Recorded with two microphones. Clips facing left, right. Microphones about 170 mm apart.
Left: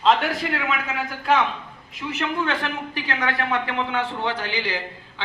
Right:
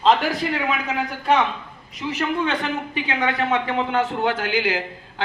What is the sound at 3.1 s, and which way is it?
Speech, 20° right (ahead or behind).